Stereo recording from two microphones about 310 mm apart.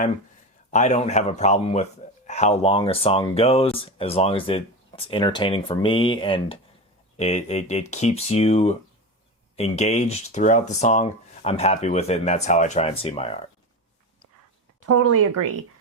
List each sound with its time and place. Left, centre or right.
0.7 s speech: left
14.8 s speech: right